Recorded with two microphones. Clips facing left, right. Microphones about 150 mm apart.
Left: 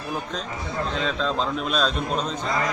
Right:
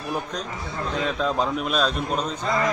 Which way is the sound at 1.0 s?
10° right (ahead or behind).